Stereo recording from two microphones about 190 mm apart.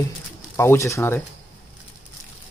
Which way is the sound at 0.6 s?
15° left (ahead or behind).